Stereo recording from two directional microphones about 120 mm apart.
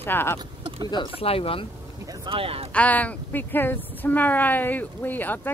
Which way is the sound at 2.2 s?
50° right (ahead or behind).